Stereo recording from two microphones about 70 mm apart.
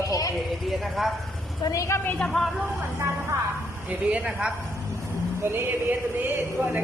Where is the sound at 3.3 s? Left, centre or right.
Right.